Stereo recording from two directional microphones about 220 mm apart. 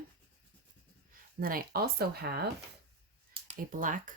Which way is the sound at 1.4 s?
40° right (ahead or behind).